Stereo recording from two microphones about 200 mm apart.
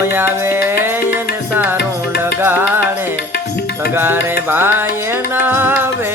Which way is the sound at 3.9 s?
10° right (ahead or behind).